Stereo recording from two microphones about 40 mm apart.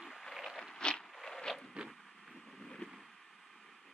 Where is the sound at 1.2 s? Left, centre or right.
Centre.